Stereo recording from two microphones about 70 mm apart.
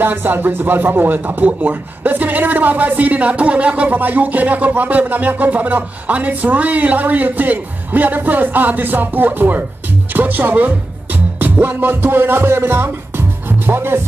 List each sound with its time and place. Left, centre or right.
0.0 s speech: right
10.1 s music: right